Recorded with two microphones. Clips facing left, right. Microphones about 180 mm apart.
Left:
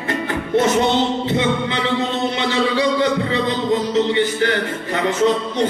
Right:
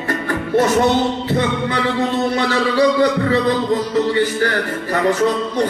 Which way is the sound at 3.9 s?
20° left (ahead or behind).